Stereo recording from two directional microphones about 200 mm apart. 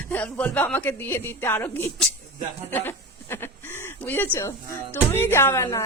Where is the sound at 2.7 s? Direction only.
10° left (ahead or behind).